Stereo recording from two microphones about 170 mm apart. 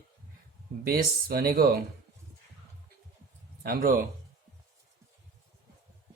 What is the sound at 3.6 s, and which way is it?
Speech, 55° right (ahead or behind).